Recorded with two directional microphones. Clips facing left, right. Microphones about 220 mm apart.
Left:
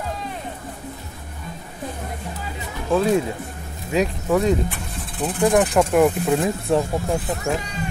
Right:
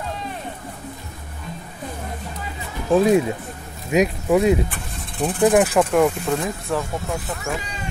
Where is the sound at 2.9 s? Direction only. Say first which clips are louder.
Right 3 dB; 15° right (ahead or behind); by 6.3 s 5° left (ahead or behind).